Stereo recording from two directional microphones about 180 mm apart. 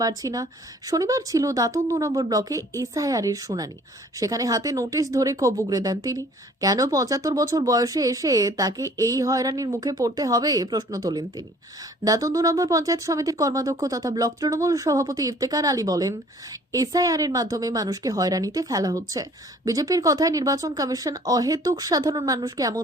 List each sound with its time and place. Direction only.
0.0 s a woman's voice: 20° right (ahead or behind)